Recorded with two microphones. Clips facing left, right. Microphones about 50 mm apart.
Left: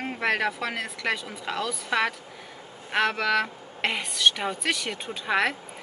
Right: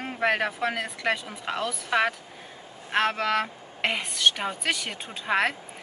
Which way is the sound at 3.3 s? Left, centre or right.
Centre.